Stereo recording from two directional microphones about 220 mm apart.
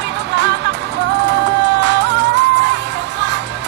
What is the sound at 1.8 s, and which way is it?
Music, 55° right (ahead or behind).